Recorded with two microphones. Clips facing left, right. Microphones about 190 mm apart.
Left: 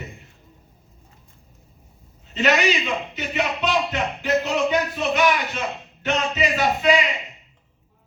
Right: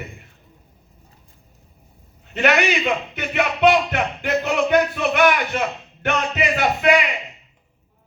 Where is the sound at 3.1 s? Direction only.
60° right (ahead or behind).